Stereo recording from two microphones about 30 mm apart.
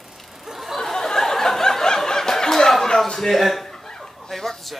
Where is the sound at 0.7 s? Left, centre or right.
Centre.